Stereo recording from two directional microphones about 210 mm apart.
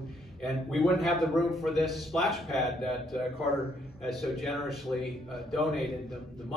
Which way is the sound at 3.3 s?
50° left (ahead or behind).